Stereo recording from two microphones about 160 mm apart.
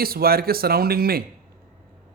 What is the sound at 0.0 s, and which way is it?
Speech, 70° right (ahead or behind).